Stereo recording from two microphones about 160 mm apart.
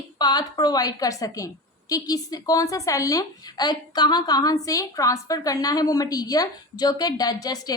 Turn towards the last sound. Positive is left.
turn(degrees=25)  # may be behind; listen again after turning